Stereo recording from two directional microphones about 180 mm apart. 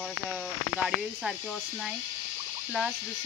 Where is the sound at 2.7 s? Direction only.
Centre (ahead or behind).